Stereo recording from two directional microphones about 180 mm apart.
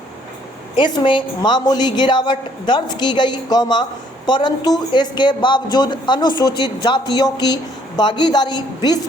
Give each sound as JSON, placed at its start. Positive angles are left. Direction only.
{"t": 0.8, "sound": "a woman's voice", "side_deg": 25}